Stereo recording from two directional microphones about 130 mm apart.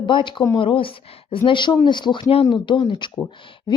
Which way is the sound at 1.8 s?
35° left (ahead or behind).